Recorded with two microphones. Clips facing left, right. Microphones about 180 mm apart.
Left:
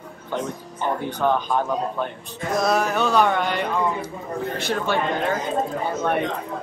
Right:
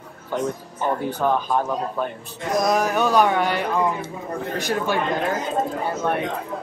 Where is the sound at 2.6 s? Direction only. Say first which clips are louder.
Right 1 dB; 15° right (ahead or behind).